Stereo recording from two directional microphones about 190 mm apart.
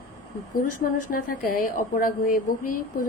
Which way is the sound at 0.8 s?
50° left (ahead or behind).